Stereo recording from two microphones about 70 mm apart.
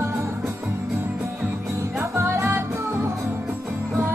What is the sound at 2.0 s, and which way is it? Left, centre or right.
Music, right.